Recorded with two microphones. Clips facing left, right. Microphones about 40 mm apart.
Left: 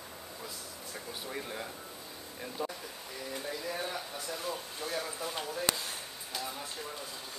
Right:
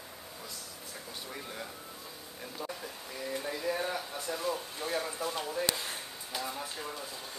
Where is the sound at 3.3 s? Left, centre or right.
Centre.